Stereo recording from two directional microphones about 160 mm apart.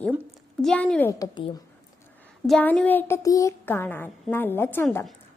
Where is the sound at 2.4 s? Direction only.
5° left (ahead or behind).